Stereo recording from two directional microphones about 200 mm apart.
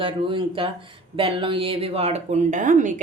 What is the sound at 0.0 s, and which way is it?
Speech, 25° right (ahead or behind).